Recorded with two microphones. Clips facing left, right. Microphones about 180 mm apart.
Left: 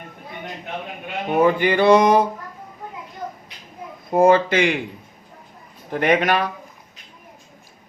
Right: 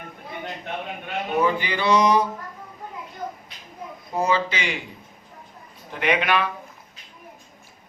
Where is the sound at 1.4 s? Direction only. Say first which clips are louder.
Left 7 dB; 50° left (ahead or behind).